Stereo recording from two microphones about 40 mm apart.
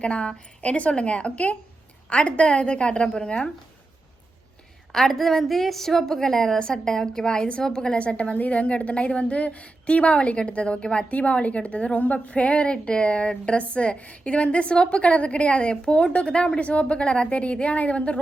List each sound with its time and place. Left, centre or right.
0.0 s a woman's voice: left
4.9 s a woman's voice: centre; by 18.2 s left